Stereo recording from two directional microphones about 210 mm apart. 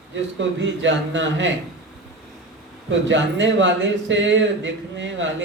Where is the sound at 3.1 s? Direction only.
60° right (ahead or behind).